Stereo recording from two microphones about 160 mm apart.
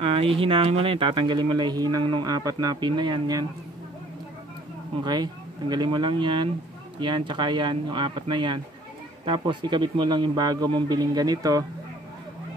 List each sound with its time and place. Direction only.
0.0 s speech: 35° right (ahead or behind)
5.0 s speech: 25° right (ahead or behind)